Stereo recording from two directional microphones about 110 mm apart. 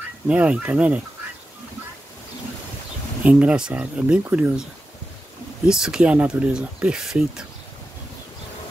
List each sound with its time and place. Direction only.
0.3 s speech: 10° right (ahead or behind)
3.3 s speech: 10° right (ahead or behind)
5.7 s speech: 5° right (ahead or behind)